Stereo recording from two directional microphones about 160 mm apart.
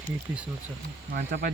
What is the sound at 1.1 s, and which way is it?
Speech, 80° right.